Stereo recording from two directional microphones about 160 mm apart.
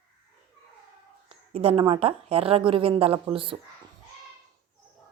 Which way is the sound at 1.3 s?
40° right (ahead or behind).